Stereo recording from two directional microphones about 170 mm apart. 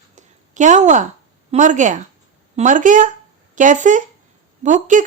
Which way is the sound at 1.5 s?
45° right (ahead or behind).